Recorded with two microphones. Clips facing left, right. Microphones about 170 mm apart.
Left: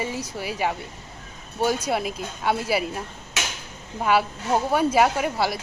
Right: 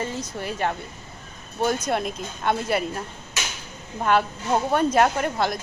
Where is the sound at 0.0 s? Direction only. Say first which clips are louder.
Even; 10° left (ahead or behind).